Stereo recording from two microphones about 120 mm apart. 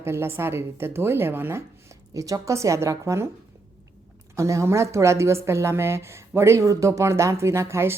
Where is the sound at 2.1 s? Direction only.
30° right (ahead or behind).